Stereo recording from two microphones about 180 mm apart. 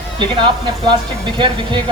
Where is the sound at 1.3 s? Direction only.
25° right (ahead or behind).